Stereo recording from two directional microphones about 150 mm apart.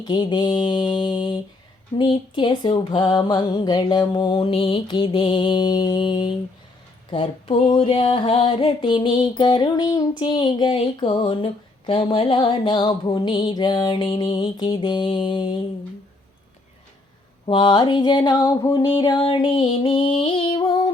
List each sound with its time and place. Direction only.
0.0 s female singing: 30° left (ahead or behind)
17.4 s female singing: 35° left (ahead or behind)